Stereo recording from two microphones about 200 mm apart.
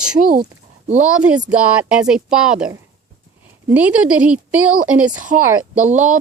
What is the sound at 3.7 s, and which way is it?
Speech, 5° right (ahead or behind).